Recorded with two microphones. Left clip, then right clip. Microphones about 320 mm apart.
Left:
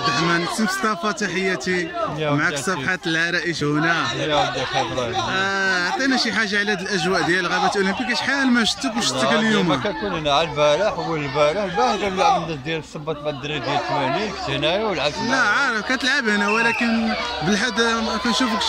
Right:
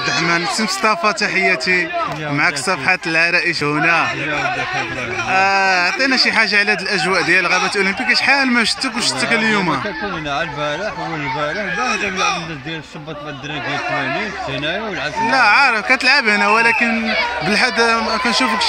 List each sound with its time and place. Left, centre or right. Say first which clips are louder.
0.3 s speech: right 4 dB; centre
5.3 s speech: right 9 dB; centre
10.3 s speech: left 5 dB; centre
15.3 s speech: right 7 dB; centre